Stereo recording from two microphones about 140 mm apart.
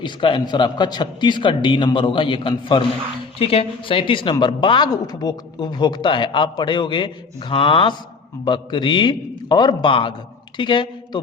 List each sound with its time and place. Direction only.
0.0 s a woman's voice: 35° left (ahead or behind)